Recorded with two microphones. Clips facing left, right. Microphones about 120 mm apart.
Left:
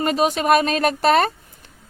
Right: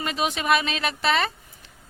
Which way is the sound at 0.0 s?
45° left (ahead or behind).